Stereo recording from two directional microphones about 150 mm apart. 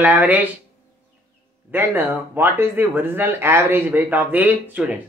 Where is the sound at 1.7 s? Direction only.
15° right (ahead or behind).